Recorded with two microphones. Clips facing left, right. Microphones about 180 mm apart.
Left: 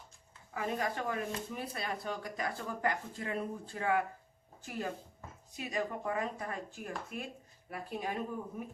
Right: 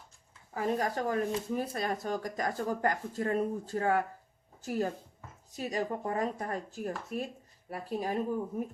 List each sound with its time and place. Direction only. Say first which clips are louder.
0.5 s speech: right 4 dB; 40° right (ahead or behind)